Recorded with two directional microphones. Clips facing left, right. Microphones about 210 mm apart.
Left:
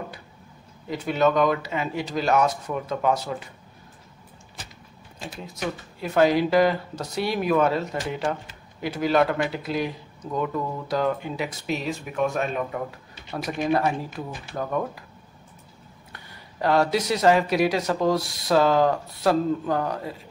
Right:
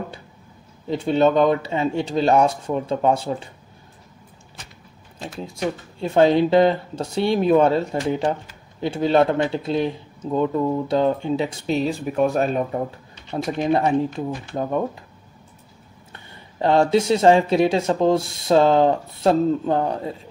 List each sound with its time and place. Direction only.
0.8 s speech: 30° right (ahead or behind)
5.4 s speech: 30° right (ahead or behind)
13.3 s speech: 25° right (ahead or behind)
16.1 s speech: 25° right (ahead or behind)